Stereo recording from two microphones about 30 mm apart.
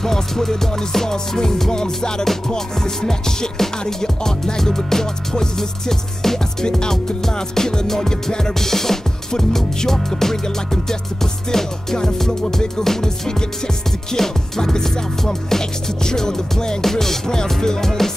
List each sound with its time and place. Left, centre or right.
0.0 s music: centre
14.1 s music: centre